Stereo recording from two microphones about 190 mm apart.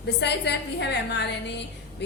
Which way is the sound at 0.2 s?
65° left (ahead or behind).